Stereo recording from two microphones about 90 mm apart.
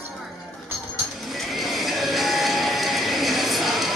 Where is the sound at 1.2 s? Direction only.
Centre (ahead or behind).